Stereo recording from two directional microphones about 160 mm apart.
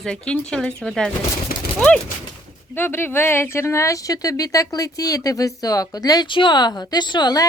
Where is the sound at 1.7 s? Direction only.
5° left (ahead or behind).